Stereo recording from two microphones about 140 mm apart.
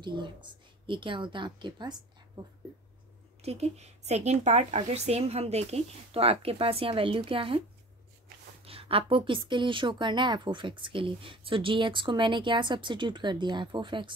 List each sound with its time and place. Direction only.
0.0 s a woman's voice: 35° right (ahead or behind)
3.4 s speech: 50° right (ahead or behind)
8.6 s a woman's voice: 40° right (ahead or behind)